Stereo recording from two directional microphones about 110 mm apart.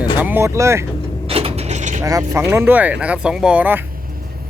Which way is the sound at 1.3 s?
60° right (ahead or behind).